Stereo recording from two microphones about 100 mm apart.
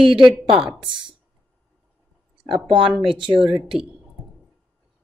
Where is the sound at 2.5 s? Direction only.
60° right (ahead or behind).